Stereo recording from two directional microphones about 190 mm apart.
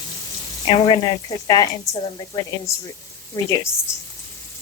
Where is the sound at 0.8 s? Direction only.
25° left (ahead or behind).